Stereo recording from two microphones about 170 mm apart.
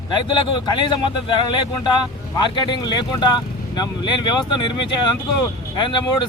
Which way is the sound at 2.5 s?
25° left (ahead or behind).